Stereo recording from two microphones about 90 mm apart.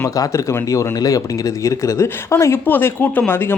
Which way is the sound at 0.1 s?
40° left (ahead or behind).